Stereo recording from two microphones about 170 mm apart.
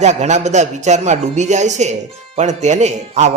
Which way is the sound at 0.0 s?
40° right (ahead or behind).